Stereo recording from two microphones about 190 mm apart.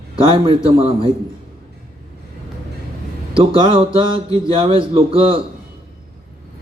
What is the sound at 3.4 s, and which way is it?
A man's voice, 25° right (ahead or behind).